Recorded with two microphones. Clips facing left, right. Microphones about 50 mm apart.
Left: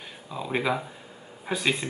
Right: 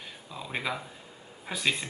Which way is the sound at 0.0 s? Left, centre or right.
Centre.